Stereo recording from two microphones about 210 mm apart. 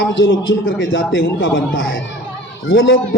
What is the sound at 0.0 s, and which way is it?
A man's voice, 65° left (ahead or behind).